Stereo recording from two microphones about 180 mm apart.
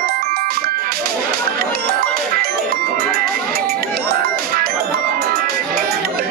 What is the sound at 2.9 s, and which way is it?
Music, 55° right (ahead or behind).